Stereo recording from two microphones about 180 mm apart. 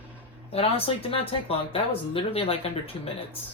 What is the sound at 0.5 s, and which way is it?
Speech, 30° left (ahead or behind).